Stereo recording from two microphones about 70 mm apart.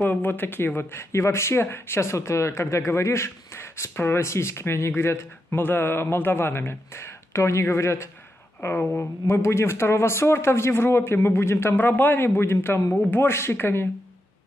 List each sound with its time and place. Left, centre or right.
0.0 s a man's voice: left